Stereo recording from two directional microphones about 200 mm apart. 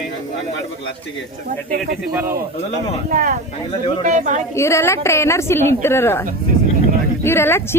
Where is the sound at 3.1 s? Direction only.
45° right (ahead or behind).